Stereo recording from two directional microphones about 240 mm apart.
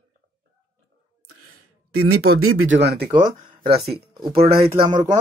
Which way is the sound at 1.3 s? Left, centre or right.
Right.